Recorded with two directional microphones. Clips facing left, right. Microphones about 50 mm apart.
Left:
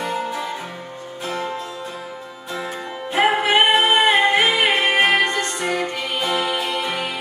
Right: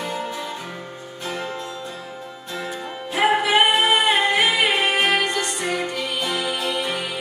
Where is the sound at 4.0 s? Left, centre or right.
Left.